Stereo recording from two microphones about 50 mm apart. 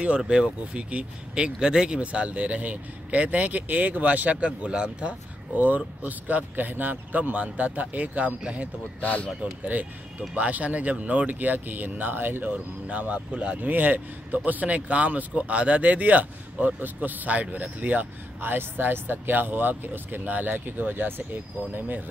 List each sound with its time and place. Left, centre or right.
0.2 s speech: centre
5.6 s speech: right
9.0 s speech: left
9.4 s speech: right
12.8 s speech: right
13.6 s speech: right
18.4 s speech: right